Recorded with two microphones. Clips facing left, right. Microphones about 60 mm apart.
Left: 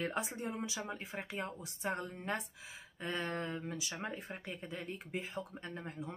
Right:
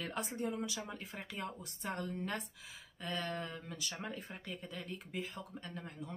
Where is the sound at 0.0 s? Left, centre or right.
Left.